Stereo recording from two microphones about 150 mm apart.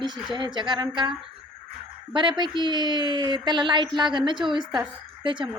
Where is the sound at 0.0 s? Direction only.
30° right (ahead or behind).